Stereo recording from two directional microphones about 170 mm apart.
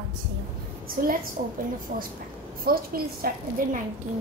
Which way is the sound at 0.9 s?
60° right (ahead or behind).